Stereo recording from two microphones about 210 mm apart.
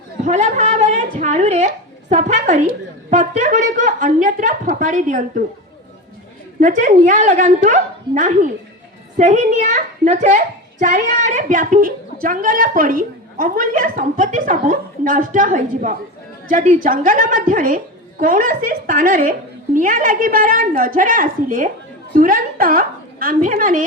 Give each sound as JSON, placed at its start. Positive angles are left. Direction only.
{"t": 0.3, "sound": "a woman's voice", "side_deg": -35}
{"t": 6.6, "sound": "a woman's voice", "side_deg": -40}